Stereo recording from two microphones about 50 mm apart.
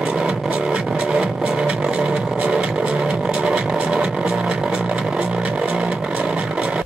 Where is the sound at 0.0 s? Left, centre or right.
Centre.